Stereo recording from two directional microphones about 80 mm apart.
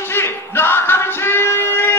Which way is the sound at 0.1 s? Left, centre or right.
Left.